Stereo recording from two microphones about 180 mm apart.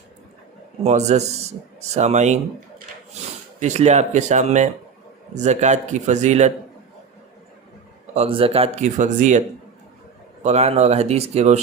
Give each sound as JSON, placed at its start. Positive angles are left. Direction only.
{"t": 0.9, "sound": "speech", "side_deg": -40}
{"t": 3.6, "sound": "speech", "side_deg": -40}
{"t": 8.1, "sound": "speech", "side_deg": -35}
{"t": 10.4, "sound": "speech", "side_deg": -35}